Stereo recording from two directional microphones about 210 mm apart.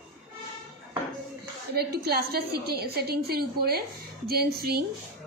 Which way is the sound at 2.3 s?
50° right (ahead or behind).